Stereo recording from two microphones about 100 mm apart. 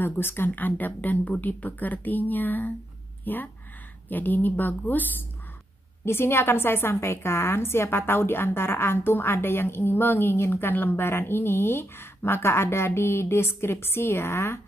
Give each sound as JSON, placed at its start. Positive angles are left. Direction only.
{"t": 0.0, "sound": "a woman's voice", "side_deg": 20}
{"t": 6.0, "sound": "a woman's voice", "side_deg": 25}